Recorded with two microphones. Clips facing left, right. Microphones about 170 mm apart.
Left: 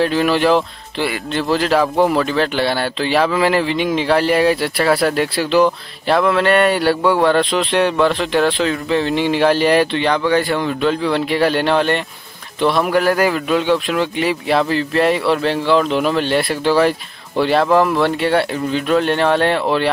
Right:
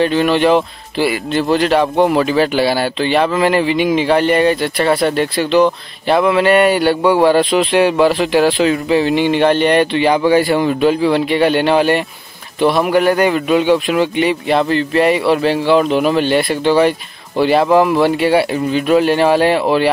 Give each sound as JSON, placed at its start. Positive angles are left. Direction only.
{"t": 0.0, "sound": "speech", "side_deg": 0}
{"t": 9.9, "sound": "speech", "side_deg": -10}